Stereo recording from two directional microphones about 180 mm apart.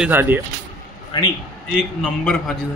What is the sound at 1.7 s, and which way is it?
Speech, 5° left (ahead or behind).